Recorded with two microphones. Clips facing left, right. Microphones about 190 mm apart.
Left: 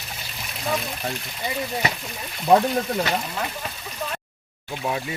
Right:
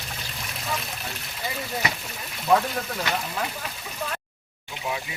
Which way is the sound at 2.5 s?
30° left (ahead or behind).